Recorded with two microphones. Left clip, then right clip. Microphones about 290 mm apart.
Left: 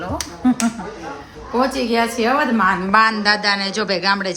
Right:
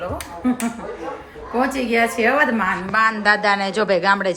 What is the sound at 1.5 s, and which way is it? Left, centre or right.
A woman's voice, centre.